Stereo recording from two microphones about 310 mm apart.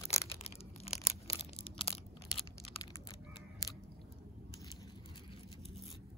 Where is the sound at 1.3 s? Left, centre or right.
Centre.